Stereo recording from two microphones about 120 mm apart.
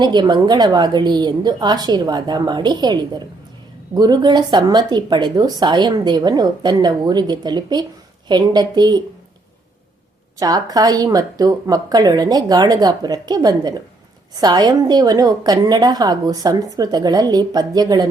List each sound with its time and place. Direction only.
0.0 s a woman's voice: 40° right (ahead or behind)
10.4 s a woman's voice: 35° right (ahead or behind)